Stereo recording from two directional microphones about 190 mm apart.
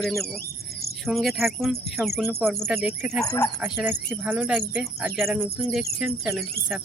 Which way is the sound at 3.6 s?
10° right (ahead or behind).